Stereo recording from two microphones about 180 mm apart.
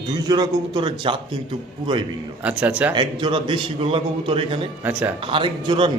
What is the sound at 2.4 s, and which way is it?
Speech, 5° right (ahead or behind).